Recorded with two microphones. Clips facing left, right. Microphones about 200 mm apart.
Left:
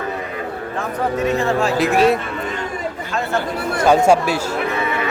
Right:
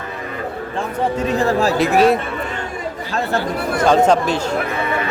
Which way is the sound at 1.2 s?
35° right (ahead or behind).